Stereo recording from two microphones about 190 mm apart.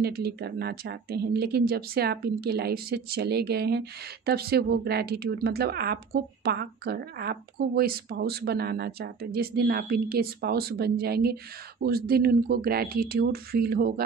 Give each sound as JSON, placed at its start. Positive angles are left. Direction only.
{"t": 0.0, "sound": "speech", "side_deg": -55}